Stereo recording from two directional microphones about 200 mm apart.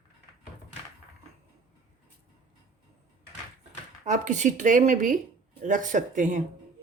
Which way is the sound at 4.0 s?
35° right (ahead or behind).